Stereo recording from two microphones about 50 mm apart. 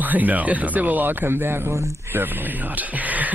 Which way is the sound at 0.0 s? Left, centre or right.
Right.